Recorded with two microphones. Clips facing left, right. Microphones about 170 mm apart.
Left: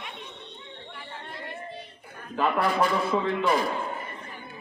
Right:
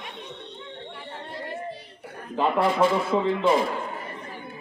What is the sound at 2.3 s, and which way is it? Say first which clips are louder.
A man's voice: right 2 dB; 25° right (ahead or behind).